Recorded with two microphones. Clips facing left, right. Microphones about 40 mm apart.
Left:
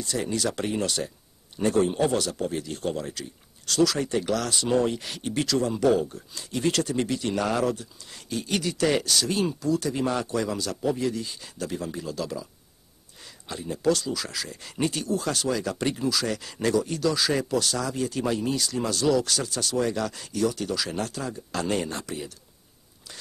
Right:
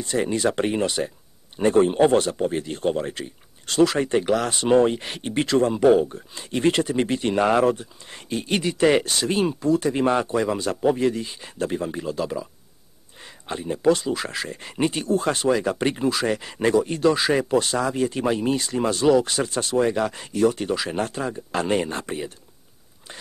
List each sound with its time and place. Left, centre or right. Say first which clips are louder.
0.0 s a man's voice: right 5 dB; right